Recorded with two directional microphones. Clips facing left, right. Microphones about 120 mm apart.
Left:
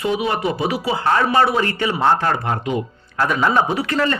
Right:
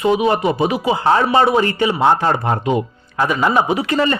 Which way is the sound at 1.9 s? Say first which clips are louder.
Even; 10° right (ahead or behind).